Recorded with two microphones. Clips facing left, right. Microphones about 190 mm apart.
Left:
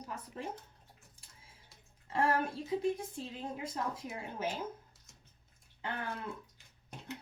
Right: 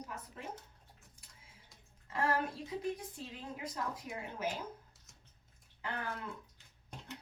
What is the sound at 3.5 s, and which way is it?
Speech, 25° left (ahead or behind).